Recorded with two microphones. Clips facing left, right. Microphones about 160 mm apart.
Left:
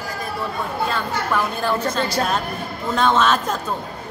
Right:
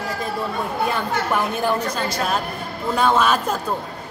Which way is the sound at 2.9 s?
10° right (ahead or behind).